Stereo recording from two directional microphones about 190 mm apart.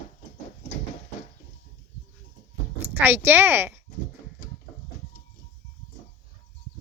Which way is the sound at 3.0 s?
10° right (ahead or behind).